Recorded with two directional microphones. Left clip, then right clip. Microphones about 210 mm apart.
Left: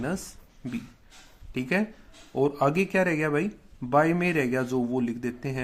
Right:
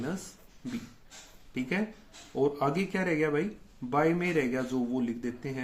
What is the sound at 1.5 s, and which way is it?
Speech, 40° left (ahead or behind).